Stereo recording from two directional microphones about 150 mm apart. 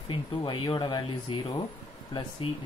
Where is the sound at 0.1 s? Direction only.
30° left (ahead or behind).